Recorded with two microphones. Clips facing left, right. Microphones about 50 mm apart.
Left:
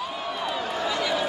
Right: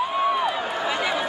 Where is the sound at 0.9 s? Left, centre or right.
Right.